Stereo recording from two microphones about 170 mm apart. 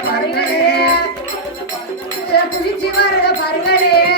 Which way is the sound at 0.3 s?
70° left (ahead or behind).